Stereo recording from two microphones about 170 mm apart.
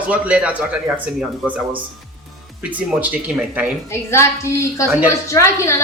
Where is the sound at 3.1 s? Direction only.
5° right (ahead or behind).